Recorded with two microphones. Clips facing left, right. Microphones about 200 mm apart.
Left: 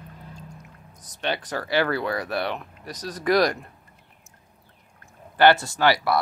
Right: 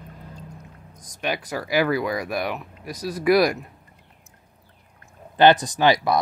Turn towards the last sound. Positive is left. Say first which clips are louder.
# right 2 dB
turn(degrees=-20)  # may be behind; listen again after turning